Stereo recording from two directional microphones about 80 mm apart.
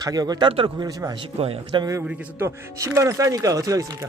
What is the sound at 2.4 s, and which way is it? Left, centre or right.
Speech, right.